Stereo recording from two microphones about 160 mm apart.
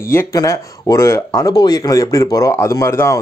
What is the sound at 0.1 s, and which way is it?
Speech, 20° left (ahead or behind).